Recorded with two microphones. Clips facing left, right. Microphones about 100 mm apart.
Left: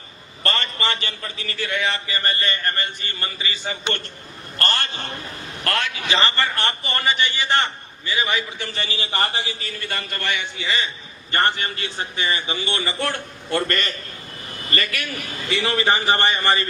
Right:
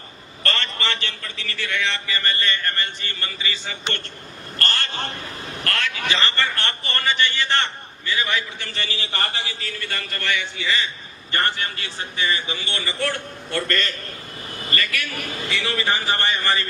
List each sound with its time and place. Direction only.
0.4 s a man's voice: 15° left (ahead or behind)
1.2 s a man's voice: 30° left (ahead or behind)
1.8 s a man's voice: 20° left (ahead or behind)
15.2 s a man's voice: 55° right (ahead or behind)
15.6 s a man's voice: 20° left (ahead or behind)